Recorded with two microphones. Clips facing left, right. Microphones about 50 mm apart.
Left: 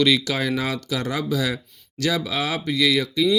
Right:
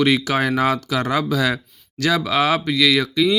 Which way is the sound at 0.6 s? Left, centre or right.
Right.